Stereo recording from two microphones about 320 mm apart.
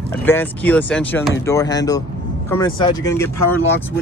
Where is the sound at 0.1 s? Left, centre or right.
Centre.